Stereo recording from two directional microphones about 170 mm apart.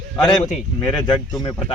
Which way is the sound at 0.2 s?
25° left (ahead or behind).